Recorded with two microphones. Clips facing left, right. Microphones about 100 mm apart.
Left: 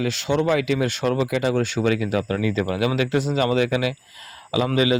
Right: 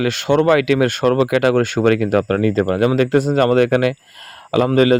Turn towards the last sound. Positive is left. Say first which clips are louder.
# right 7 dB
turn(degrees=-50)  # may be behind; listen again after turning